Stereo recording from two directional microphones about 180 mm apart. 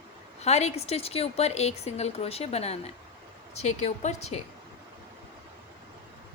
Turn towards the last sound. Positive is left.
turn(degrees=40)  # may be behind; listen again after turning